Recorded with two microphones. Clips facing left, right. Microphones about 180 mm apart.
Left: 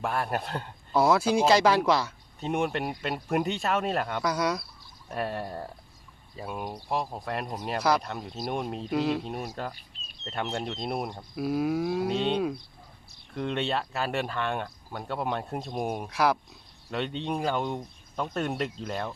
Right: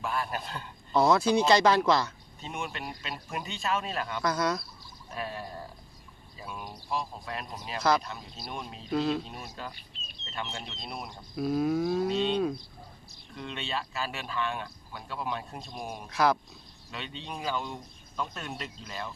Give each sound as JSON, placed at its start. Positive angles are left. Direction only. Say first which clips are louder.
{"t": 0.0, "sound": "speech", "louder": "left 4 dB", "side_deg": 60}
{"t": 0.9, "sound": "speech", "louder": "left 1 dB", "side_deg": 5}
{"t": 2.4, "sound": "speech", "louder": "left 9 dB", "side_deg": 60}
{"t": 4.2, "sound": "speech", "louder": "right 3 dB", "side_deg": 10}
{"t": 4.8, "sound": "cricket", "louder": "left 5 dB", "side_deg": 60}
{"t": 6.4, "sound": "speech", "louder": "left 6 dB", "side_deg": 55}
{"t": 7.8, "sound": "speech", "louder": "even", "side_deg": 10}
{"t": 8.0, "sound": "speech", "louder": "left 7 dB", "side_deg": 60}
{"t": 8.9, "sound": "speech", "louder": "even", "side_deg": 15}
{"t": 9.6, "sound": "speech", "louder": "left 5 dB", "side_deg": 55}
{"t": 11.3, "sound": "speech", "louder": "even", "side_deg": 10}
{"t": 12.0, "sound": "speech", "louder": "left 1 dB", "side_deg": 60}
{"t": 16.0, "sound": "speech", "louder": "right 1 dB", "side_deg": 10}
{"t": 16.9, "sound": "speech", "louder": "left 9 dB", "side_deg": 60}